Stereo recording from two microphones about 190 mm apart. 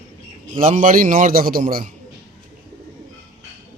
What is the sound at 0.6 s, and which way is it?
A man's voice, 40° right (ahead or behind).